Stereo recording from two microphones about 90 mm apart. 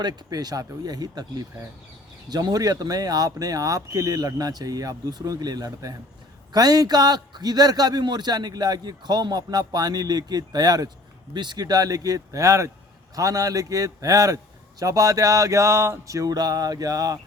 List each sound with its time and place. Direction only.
0.0 s a man's voice: 50° right (ahead or behind)
11.3 s music: 50° right (ahead or behind)